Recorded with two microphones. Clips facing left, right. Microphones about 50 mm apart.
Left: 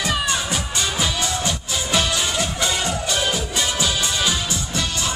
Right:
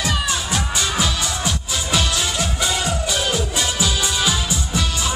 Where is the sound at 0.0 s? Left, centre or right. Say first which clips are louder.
Even; centre.